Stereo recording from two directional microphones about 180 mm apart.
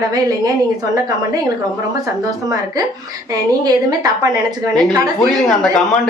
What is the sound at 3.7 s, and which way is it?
Speech, 20° right (ahead or behind).